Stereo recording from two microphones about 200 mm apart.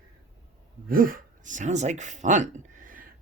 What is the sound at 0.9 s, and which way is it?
Speech, 45° right (ahead or behind).